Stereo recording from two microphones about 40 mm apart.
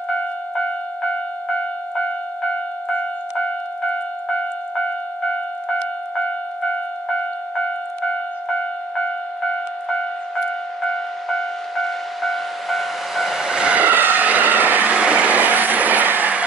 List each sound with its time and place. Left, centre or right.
8.1 s music: left
9.8 s music: left
10.8 s train: centre
13.4 s vehicle: centre
13.8 s vehicle: right
15.0 s vehicle: right